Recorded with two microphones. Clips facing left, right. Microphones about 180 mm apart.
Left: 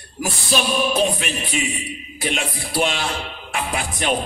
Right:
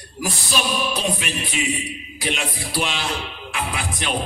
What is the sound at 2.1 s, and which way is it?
Speech, 50° left (ahead or behind).